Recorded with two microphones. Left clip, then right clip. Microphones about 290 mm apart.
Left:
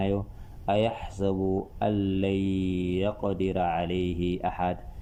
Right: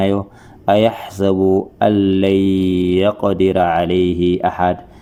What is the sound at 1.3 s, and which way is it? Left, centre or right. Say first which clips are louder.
Speech: right 15 dB; right.